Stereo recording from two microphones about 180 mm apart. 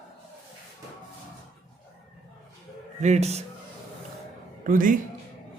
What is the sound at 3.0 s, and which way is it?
Speech, 40° right (ahead or behind).